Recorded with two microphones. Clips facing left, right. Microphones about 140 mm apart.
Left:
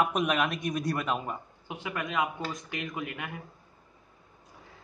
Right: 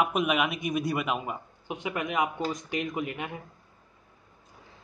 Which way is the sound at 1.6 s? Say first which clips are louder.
Right 4 dB; 20° right (ahead or behind).